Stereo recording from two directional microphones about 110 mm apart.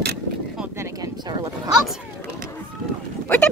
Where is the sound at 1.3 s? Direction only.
40° right (ahead or behind).